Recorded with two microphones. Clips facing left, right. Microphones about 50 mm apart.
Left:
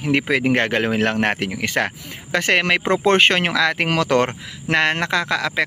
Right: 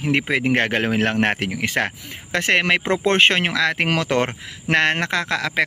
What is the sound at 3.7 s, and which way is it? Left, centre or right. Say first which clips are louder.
Speech: even; right.